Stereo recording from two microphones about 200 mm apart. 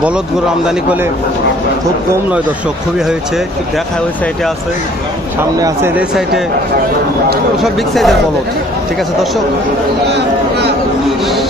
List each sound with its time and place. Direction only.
5.5 s speech: 15° right (ahead or behind)
6.0 s speech: centre (ahead or behind)
7.6 s speech: centre (ahead or behind)
10.1 s speech: 55° right (ahead or behind)